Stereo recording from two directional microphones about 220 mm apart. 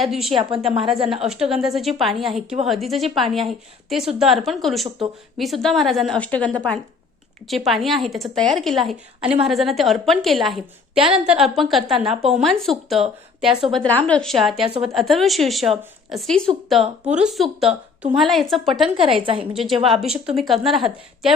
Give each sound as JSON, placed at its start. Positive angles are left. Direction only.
{"t": 0.0, "sound": "a woman's voice", "side_deg": 0}
{"t": 14.6, "sound": "a woman's voice", "side_deg": -25}
{"t": 14.9, "sound": "a woman's voice", "side_deg": 0}
{"t": 18.9, "sound": "a woman's voice", "side_deg": -25}
{"t": 19.5, "sound": "a woman's voice", "side_deg": 0}